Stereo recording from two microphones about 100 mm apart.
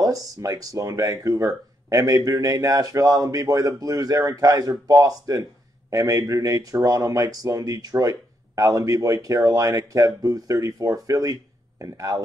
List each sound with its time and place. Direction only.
0.0 s speech: 35° right (ahead or behind)